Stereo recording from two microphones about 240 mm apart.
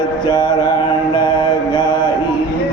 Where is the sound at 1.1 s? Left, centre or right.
Centre.